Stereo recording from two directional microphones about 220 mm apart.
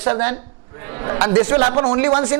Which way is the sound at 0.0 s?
25° right (ahead or behind).